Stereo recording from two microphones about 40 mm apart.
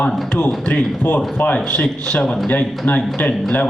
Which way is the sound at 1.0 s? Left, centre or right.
Left.